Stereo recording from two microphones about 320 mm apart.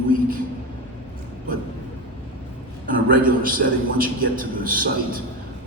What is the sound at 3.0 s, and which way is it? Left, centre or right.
A man's voice, right.